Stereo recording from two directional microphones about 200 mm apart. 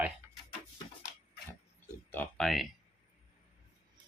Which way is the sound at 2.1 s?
5° left (ahead or behind).